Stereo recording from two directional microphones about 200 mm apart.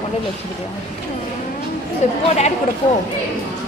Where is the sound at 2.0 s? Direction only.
35° left (ahead or behind).